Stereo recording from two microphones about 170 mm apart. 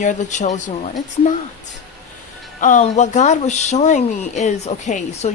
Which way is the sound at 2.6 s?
50° left (ahead or behind).